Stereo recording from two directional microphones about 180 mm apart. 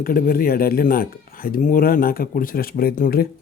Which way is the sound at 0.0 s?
55° left (ahead or behind).